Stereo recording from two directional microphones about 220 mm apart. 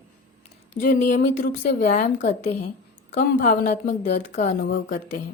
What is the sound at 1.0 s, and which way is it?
A woman's voice, 40° left (ahead or behind).